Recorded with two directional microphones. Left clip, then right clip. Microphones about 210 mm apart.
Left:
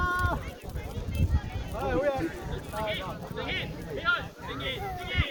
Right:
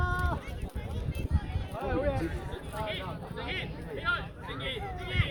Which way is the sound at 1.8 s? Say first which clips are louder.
Left 4 dB; 45° left (ahead or behind).